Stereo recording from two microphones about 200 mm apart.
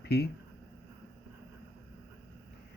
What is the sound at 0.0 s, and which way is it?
Speech, 55° left (ahead or behind).